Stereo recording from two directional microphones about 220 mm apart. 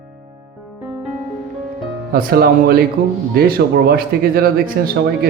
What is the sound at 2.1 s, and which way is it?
A man's voice, 45° right (ahead or behind).